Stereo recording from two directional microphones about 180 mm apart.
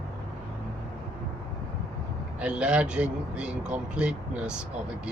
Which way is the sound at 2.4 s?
5° right (ahead or behind).